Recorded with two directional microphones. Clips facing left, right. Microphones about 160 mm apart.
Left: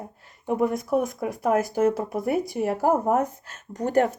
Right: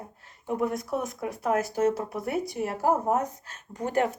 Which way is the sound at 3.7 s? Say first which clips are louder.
Left 4 dB; 40° left (ahead or behind).